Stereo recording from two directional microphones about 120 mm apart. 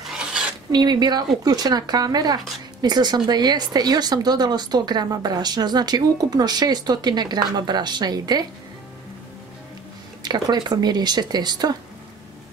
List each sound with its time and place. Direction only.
0.7 s speech: 35° right (ahead or behind)
10.2 s speech: 35° right (ahead or behind)